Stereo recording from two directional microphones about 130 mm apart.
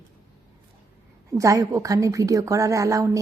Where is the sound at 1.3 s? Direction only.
25° right (ahead or behind).